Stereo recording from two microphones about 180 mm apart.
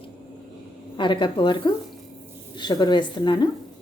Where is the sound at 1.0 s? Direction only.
25° left (ahead or behind).